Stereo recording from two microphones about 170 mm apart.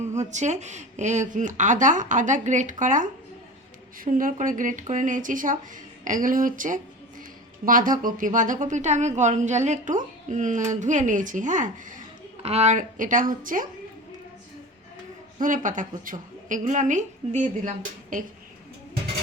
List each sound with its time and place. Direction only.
0.0 s speech: 45° right (ahead or behind)
12.4 s speech: 40° right (ahead or behind)
15.4 s speech: 50° right (ahead or behind)